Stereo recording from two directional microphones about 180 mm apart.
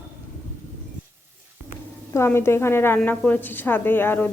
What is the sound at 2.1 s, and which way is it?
A woman's voice, 15° left (ahead or behind).